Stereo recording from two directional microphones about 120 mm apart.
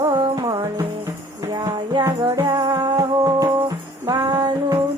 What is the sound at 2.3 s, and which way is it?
Music, 25° right (ahead or behind).